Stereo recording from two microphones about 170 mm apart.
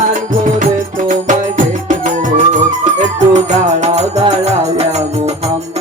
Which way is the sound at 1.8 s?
50° right (ahead or behind).